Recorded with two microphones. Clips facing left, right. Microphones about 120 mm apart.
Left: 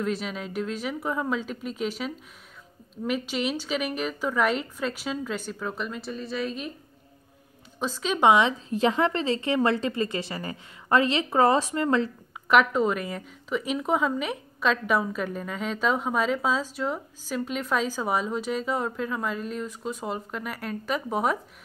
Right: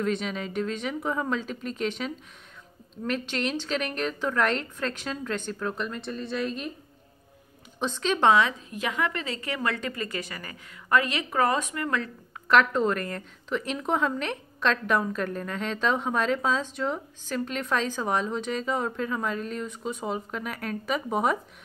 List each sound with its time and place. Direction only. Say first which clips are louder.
0.0 s a woman's voice: right 1 dB; 5° left (ahead or behind)
7.8 s a woman's voice: even; 5° left (ahead or behind)
8.3 s a woman's voice: left 3 dB; 25° left (ahead or behind)
12.4 s a woman's voice: left 1 dB; 10° left (ahead or behind)